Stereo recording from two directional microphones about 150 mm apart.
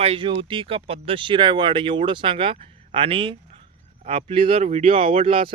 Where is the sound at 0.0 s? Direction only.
35° right (ahead or behind).